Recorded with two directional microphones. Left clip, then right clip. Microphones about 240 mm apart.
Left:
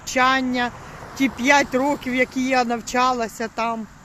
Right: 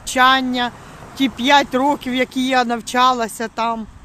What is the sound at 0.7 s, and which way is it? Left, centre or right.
Vehicle, right.